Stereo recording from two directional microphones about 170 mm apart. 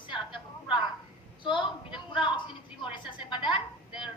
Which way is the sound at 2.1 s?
25° left (ahead or behind).